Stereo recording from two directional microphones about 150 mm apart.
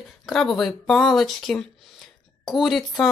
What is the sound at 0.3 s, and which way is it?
Speech, centre (ahead or behind).